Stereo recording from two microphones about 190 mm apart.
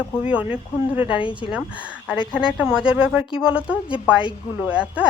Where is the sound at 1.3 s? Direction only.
5° right (ahead or behind).